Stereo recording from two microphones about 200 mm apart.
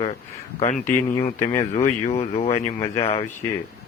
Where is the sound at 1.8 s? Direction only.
30° left (ahead or behind).